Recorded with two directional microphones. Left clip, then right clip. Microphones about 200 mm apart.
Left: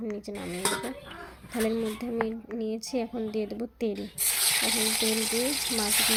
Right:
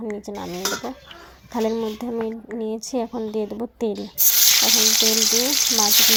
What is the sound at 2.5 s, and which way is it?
Speech, 15° right (ahead or behind).